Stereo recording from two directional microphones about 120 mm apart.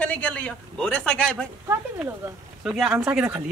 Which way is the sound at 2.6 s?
5° right (ahead or behind).